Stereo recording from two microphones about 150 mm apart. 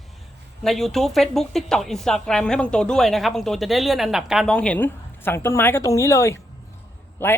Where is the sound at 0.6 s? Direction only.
Centre (ahead or behind).